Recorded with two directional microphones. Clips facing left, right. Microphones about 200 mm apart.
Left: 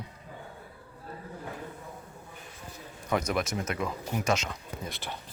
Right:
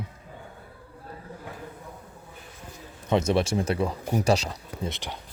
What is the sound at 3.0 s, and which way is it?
Speech, 25° right (ahead or behind).